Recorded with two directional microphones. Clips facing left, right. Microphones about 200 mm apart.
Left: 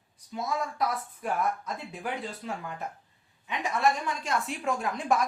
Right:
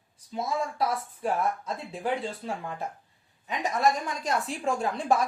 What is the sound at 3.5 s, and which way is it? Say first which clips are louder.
A woman's voice: right 1 dB; 40° right (ahead or behind).